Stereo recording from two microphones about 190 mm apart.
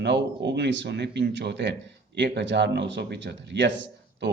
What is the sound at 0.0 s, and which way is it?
Speech, 65° right (ahead or behind).